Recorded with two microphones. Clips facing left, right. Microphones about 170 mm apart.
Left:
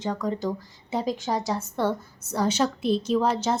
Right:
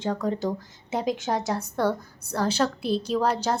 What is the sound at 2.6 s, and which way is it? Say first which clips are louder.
Speech: left 1 dB; 10° left (ahead or behind).